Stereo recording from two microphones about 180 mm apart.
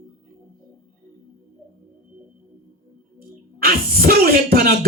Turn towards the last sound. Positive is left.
turn(degrees=-60)  # may be behind; listen again after turning